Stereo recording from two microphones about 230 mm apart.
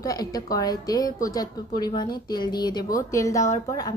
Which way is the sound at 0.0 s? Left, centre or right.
Centre.